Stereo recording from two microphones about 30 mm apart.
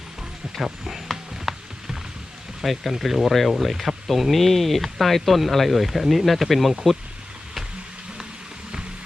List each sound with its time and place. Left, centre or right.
0.5 s speech: centre
1.1 s a sound: centre
2.6 s speech: centre